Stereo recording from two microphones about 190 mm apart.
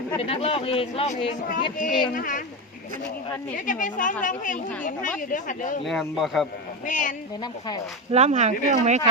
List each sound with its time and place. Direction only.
0.2 s speech: 30° left (ahead or behind); by 2.4 s 45° left (ahead or behind)
3.7 s speech: 45° left (ahead or behind)
5.8 s speech: centre (ahead or behind)
6.8 s speech: 40° left (ahead or behind)
8.1 s speech: 35° right (ahead or behind)